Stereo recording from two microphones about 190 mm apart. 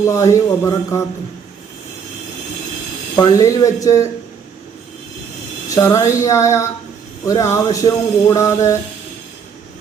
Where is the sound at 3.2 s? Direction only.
15° left (ahead or behind).